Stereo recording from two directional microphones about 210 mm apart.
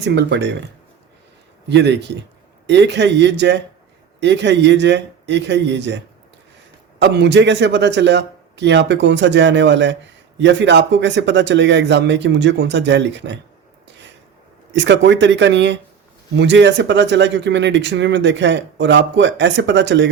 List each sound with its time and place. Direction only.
0.0 s a man's voice: 55° right (ahead or behind)
1.7 s a man's voice: 55° right (ahead or behind)
7.0 s a man's voice: 55° right (ahead or behind)
14.7 s a man's voice: 55° right (ahead or behind)